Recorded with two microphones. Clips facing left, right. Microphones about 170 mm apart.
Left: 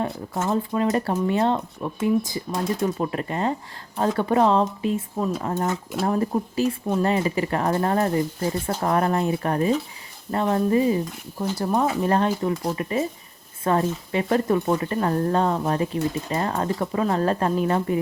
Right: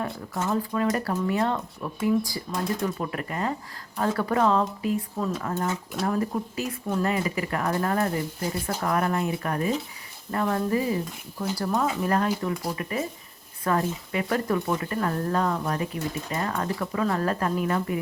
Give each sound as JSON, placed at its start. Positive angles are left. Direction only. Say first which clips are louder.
{"t": 0.4, "sound": "speech", "louder": "left 2 dB", "side_deg": 25}